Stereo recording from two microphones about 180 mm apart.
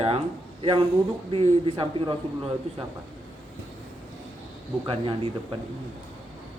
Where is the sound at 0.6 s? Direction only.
30° right (ahead or behind).